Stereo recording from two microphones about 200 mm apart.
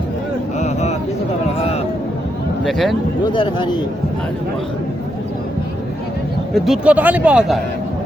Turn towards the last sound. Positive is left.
turn(degrees=-5)  # may be behind; listen again after turning